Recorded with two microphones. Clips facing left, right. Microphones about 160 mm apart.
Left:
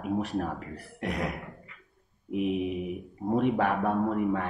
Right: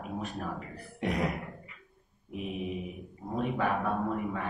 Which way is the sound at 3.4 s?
75° left (ahead or behind).